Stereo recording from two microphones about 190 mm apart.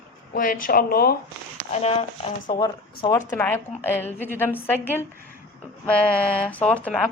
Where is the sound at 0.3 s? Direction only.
45° left (ahead or behind).